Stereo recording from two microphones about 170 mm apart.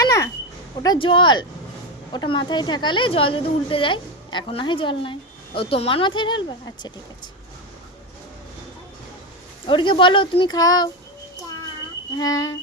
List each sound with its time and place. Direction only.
0.0 s a sound: 20° left (ahead or behind)
0.8 s a woman's voice: 25° left (ahead or behind)
9.6 s a woman's voice: 30° left (ahead or behind)
12.2 s a woman's voice: 20° left (ahead or behind)